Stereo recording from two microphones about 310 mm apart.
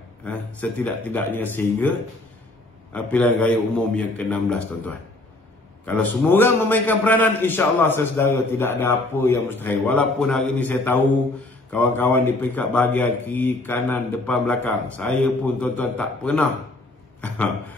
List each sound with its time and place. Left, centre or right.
0.2 s a man's voice: centre